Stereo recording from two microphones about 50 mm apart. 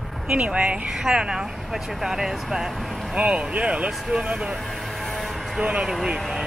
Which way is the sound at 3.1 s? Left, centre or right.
Centre.